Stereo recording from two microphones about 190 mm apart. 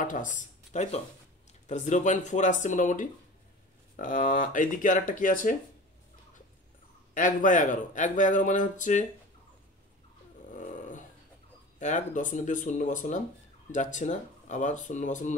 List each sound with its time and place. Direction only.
0.0 s speech: 45° left (ahead or behind)
7.2 s speech: 45° left (ahead or behind)
10.5 s dog: 45° left (ahead or behind)
11.8 s speech: 40° left (ahead or behind)